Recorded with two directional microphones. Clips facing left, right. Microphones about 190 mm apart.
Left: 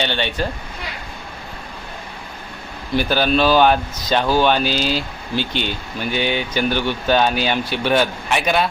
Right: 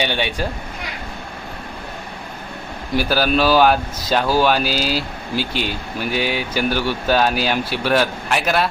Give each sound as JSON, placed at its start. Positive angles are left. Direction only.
{"t": 0.0, "sound": "speech", "side_deg": -10}
{"t": 2.9, "sound": "speech", "side_deg": -5}